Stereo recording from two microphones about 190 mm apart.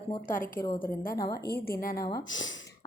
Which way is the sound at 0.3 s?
45° left (ahead or behind).